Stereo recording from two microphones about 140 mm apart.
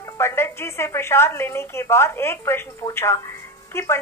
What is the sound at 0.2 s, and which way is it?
A woman's voice, 20° left (ahead or behind).